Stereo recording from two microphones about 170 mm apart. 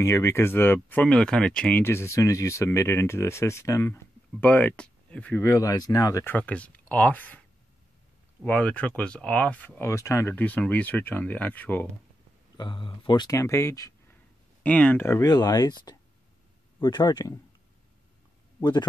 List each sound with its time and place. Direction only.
0.0 s speech: 15° left (ahead or behind)
8.5 s speech: 10° left (ahead or behind)
12.5 s speech: 30° left (ahead or behind)
14.6 s speech: 10° left (ahead or behind)
18.6 s speech: 25° left (ahead or behind)